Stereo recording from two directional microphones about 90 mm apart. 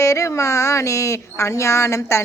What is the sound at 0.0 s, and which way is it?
Speech, 35° left (ahead or behind).